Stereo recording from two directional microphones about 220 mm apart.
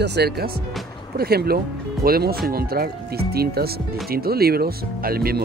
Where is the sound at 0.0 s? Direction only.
50° right (ahead or behind).